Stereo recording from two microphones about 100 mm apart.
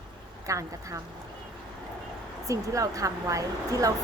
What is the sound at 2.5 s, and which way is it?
A woman's voice, 35° right (ahead or behind).